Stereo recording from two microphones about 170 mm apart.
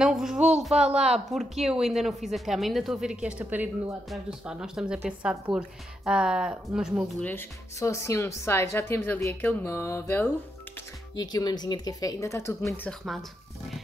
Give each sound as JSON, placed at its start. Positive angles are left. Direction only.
{"t": 0.0, "sound": "a sound", "side_deg": -5}
{"t": 0.7, "sound": "speech", "side_deg": -40}
{"t": 1.1, "sound": "speech", "side_deg": 0}
{"t": 7.2, "sound": "speech", "side_deg": 10}
{"t": 11.1, "sound": "speech", "side_deg": 25}